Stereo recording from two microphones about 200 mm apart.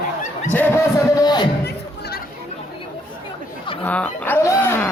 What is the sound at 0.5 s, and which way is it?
Music, 10° left (ahead or behind).